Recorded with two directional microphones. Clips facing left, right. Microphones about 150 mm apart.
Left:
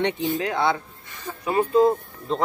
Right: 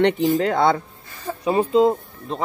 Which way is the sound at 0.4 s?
50° right (ahead or behind).